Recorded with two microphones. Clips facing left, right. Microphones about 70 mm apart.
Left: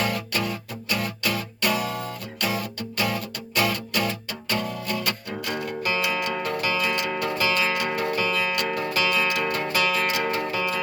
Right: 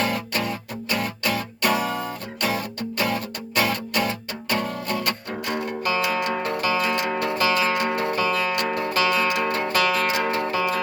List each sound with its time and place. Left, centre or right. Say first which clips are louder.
0.9 s music: right 2 dB; right
3.0 s music: right 1 dB; right
4.6 s music: right 2 dB; right